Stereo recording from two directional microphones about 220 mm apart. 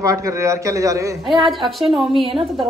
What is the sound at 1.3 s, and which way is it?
Speech, centre (ahead or behind).